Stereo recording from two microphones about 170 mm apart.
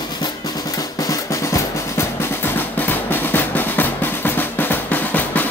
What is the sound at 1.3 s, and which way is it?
Music, 15° left (ahead or behind).